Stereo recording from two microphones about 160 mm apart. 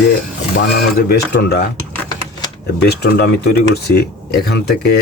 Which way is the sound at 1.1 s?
90° left.